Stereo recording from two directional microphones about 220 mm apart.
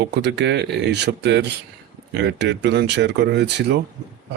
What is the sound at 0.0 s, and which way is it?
Speech, 50° right (ahead or behind).